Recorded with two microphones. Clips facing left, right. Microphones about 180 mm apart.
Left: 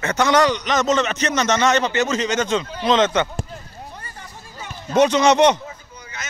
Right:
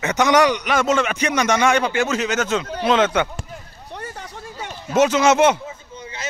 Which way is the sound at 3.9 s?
70° right (ahead or behind).